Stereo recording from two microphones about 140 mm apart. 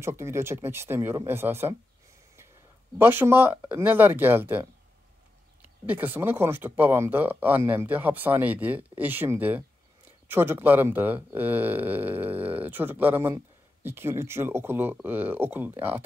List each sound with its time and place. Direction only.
0.0 s speech: 20° right (ahead or behind)
3.0 s speech: 15° right (ahead or behind)
5.9 s speech: 15° right (ahead or behind)